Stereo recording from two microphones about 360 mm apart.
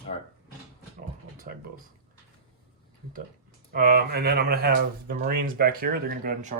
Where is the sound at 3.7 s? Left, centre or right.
Right.